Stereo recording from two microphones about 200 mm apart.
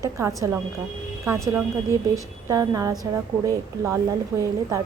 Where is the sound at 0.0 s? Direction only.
15° right (ahead or behind).